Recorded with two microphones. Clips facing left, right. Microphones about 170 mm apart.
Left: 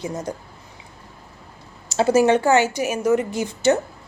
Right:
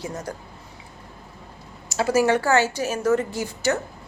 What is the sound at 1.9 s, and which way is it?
A woman's voice, 25° left (ahead or behind).